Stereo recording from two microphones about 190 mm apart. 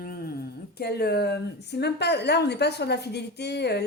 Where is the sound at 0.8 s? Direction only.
55° left (ahead or behind).